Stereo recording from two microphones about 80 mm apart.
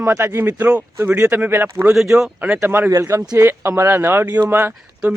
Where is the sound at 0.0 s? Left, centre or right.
Right.